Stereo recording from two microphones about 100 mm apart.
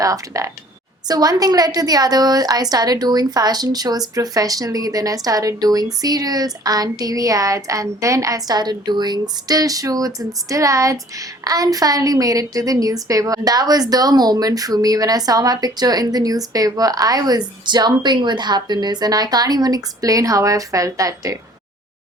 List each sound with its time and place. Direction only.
0.0 s a woman's voice: 35° right (ahead or behind)